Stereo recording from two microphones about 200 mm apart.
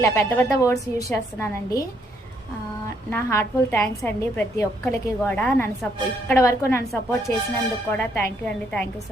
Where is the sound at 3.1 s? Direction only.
10° left (ahead or behind).